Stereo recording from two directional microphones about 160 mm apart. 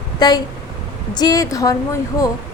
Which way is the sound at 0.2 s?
25° left (ahead or behind).